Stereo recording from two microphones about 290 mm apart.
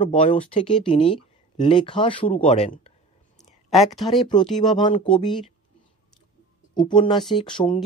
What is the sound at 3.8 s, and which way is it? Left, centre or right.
Speech, centre.